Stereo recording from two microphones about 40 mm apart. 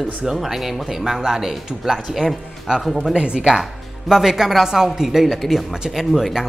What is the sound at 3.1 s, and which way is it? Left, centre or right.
Speech, right.